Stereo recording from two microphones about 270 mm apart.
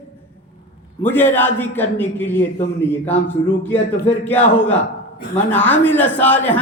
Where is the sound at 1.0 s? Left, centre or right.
Centre.